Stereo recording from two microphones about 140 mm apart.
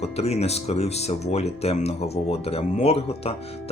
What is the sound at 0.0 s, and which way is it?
Speech, 50° left (ahead or behind).